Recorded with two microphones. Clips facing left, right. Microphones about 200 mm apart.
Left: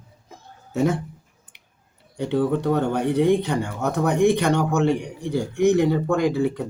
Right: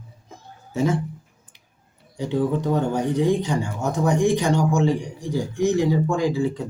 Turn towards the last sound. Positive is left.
turn(degrees=60)  # may be behind; listen again after turning